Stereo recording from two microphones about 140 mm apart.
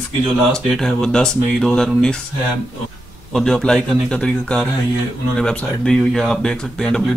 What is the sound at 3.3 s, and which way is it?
Speech, 5° left (ahead or behind).